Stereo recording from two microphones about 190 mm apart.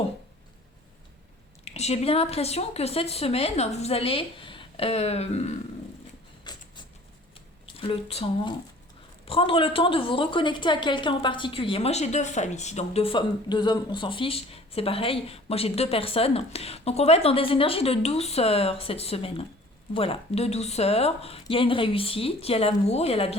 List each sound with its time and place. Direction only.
1.6 s a woman's voice: 35° left (ahead or behind)
6.4 s a sound: 20° left (ahead or behind)
7.8 s a woman's voice: 30° left (ahead or behind)